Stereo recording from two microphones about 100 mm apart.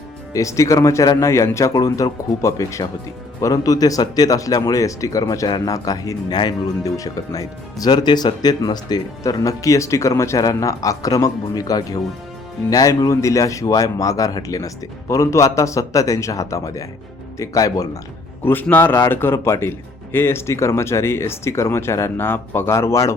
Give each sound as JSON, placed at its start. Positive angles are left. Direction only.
{"t": 0.3, "sound": "speech", "side_deg": 30}
{"t": 1.7, "sound": "speech", "side_deg": 40}
{"t": 18.4, "sound": "speech", "side_deg": 20}